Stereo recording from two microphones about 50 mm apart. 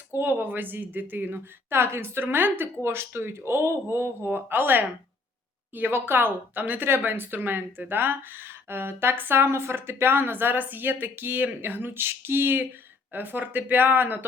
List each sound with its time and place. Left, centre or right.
0.2 s speech: right
1.7 s speech: right
4.3 s speech: right
5.9 s speech: right